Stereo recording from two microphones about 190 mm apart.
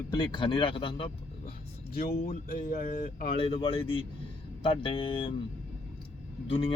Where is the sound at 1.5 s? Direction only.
50° left (ahead or behind).